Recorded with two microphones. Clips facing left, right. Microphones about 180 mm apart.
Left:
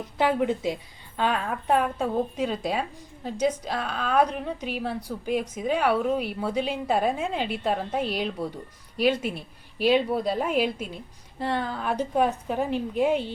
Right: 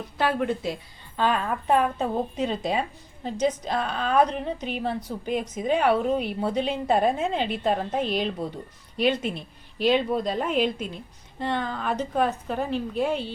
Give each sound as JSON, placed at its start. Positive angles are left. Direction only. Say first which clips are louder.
{"t": 0.2, "sound": "a woman's voice", "louder": "left 1 dB", "side_deg": 15}